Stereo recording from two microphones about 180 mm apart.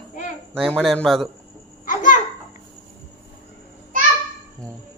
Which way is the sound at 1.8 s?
45° left (ahead or behind).